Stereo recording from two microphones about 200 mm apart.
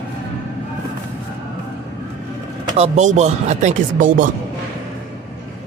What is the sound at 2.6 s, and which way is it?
Speech, 35° right (ahead or behind).